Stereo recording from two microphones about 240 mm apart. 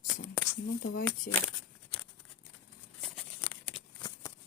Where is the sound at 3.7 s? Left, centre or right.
Centre.